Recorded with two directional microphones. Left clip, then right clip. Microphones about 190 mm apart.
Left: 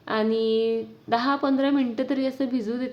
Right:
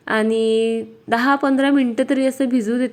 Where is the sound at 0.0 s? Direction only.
30° right (ahead or behind).